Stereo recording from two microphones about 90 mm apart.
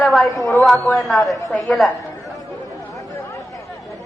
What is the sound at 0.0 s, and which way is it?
Speech, centre (ahead or behind).